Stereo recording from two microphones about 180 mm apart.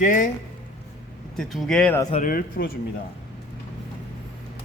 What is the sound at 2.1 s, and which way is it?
Speech, 45° left (ahead or behind).